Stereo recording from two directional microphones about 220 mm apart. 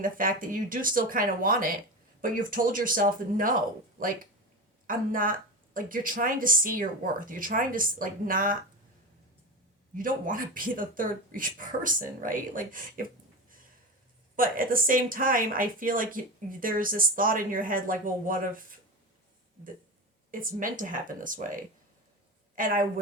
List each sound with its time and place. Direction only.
0.0 s speech: 40° right (ahead or behind)
4.9 s speech: 40° right (ahead or behind)
9.9 s speech: 40° right (ahead or behind)
14.3 s speech: 40° right (ahead or behind)
20.3 s speech: 40° right (ahead or behind)